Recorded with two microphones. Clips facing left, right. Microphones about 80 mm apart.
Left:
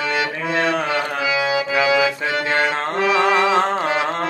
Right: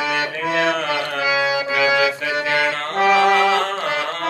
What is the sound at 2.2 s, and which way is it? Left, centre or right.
Music, left.